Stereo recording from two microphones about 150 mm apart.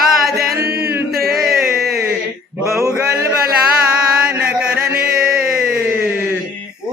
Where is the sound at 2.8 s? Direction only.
20° right (ahead or behind).